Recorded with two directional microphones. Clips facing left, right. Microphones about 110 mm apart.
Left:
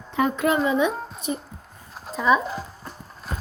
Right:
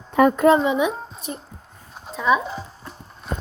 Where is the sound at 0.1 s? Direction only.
50° right (ahead or behind).